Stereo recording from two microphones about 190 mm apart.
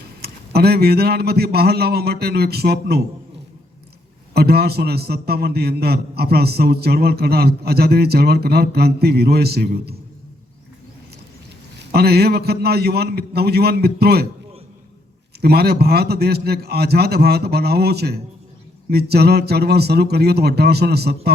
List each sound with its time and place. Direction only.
0.2 s a man's voice: 55° right (ahead or behind)
4.4 s a man's voice: 55° right (ahead or behind)
11.8 s a man's voice: 55° right (ahead or behind)
15.4 s a man's voice: 55° right (ahead or behind)